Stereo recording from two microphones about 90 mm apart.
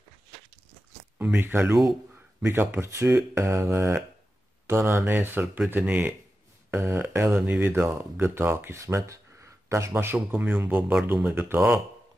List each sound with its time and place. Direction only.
1.1 s speech: 20° right (ahead or behind)
3.3 s mantra: 30° right (ahead or behind)
4.6 s speech: 30° right (ahead or behind)